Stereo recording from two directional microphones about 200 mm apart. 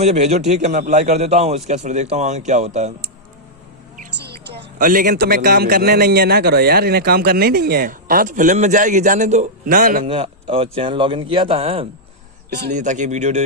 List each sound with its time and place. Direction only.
0.0 s a man's voice: 35° right (ahead or behind)
4.2 s speech: 55° right (ahead or behind)
10.1 s speech: 30° right (ahead or behind)
12.7 s a man's voice: 40° right (ahead or behind)